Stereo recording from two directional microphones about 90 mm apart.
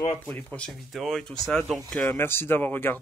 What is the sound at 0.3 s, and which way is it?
Speech, 15° left (ahead or behind).